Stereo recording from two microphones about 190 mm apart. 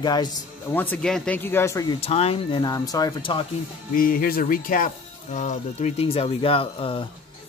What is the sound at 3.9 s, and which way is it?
Speech, 50° left (ahead or behind).